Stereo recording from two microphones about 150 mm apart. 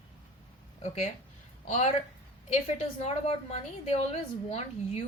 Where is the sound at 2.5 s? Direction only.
45° left (ahead or behind).